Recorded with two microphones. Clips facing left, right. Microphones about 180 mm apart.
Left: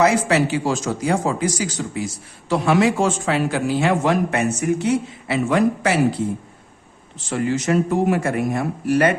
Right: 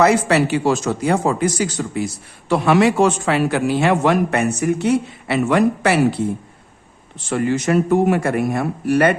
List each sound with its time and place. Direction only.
0.0 s speech: 60° right (ahead or behind)
7.3 s speech: 60° right (ahead or behind)